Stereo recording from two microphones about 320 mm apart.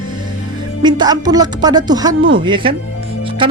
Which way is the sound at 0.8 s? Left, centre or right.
Centre.